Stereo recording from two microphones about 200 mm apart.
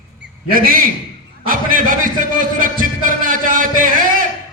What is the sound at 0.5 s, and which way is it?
Speech, 45° right (ahead or behind).